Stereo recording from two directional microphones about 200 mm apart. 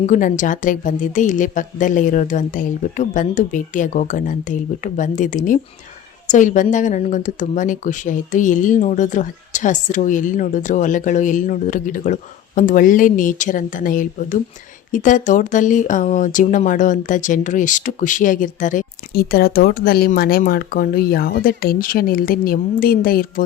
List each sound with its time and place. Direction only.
0.0 s speech: 40° left (ahead or behind)